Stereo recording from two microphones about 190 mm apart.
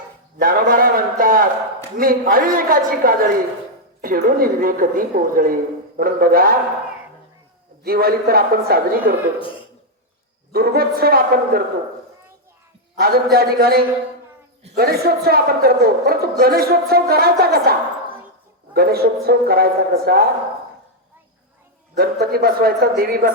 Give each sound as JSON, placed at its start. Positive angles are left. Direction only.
{"t": 0.3, "sound": "a woman's voice", "side_deg": -50}
{"t": 7.9, "sound": "a woman's voice", "side_deg": -55}
{"t": 10.5, "sound": "a woman's voice", "side_deg": -55}
{"t": 13.0, "sound": "a woman's voice", "side_deg": -55}
{"t": 21.9, "sound": "a woman's voice", "side_deg": -55}